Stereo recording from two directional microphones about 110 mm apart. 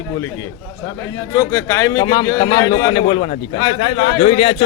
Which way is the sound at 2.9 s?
60° left (ahead or behind).